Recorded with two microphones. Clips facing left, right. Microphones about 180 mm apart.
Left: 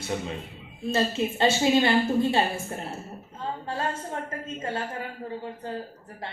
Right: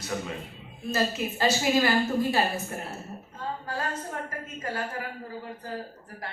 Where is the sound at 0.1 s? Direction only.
25° left (ahead or behind).